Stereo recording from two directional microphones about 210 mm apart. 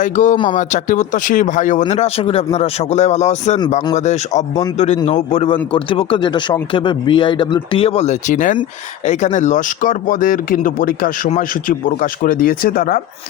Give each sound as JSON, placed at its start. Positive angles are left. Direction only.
{"t": 0.0, "sound": "speech", "side_deg": 35}